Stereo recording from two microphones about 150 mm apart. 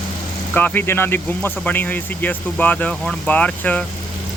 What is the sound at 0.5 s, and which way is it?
Speech, 10° left (ahead or behind).